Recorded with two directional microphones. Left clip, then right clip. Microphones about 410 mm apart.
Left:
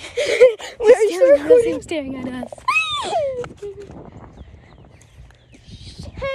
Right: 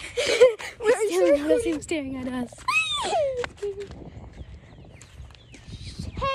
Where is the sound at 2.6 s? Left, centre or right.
Centre.